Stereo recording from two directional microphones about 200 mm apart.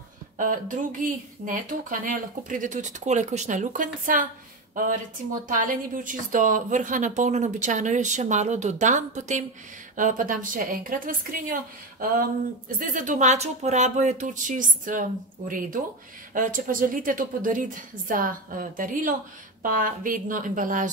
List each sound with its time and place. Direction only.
0.4 s a woman's voice: 40° right (ahead or behind)
5.5 s a woman's voice: 40° right (ahead or behind)